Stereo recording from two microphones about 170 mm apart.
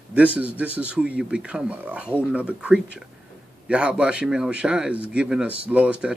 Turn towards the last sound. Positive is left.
turn(degrees=-5)  # may be behind; listen again after turning